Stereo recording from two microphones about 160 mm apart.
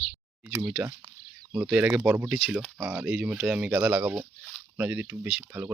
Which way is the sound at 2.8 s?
10° right (ahead or behind).